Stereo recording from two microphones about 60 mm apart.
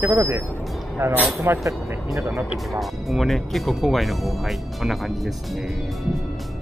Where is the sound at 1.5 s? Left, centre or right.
Right.